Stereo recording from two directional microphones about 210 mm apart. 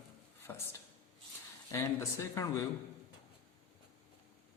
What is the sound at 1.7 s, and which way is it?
Speech, 15° left (ahead or behind).